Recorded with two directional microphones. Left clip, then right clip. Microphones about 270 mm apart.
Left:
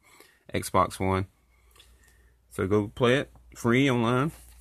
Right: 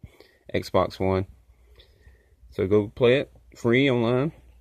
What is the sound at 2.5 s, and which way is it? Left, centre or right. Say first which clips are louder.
Speech: right 4 dB; centre.